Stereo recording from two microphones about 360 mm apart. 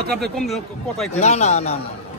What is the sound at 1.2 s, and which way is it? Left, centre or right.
Speech, centre.